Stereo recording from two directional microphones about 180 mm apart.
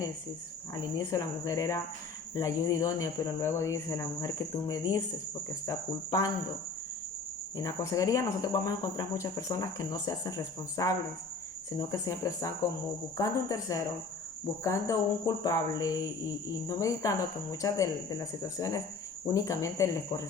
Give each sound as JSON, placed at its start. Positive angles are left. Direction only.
{"t": 0.7, "sound": "speech", "side_deg": 20}
{"t": 7.5, "sound": "speech", "side_deg": 20}